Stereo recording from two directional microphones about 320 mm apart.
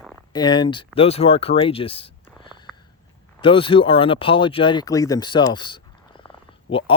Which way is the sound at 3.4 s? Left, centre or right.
Centre.